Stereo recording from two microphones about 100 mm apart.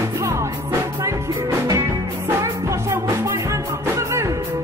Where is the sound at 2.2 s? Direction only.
25° right (ahead or behind).